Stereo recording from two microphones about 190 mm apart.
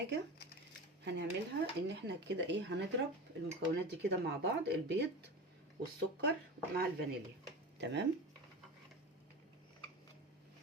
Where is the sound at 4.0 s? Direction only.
60° right (ahead or behind).